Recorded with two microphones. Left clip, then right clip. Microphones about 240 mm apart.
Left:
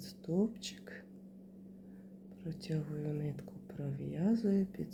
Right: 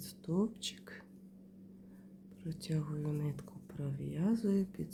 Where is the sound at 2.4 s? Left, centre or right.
Centre.